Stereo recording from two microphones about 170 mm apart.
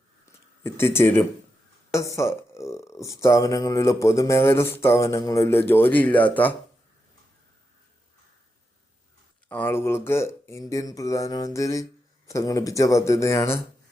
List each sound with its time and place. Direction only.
0.6 s speech: 15° left (ahead or behind)
9.5 s speech: 10° left (ahead or behind)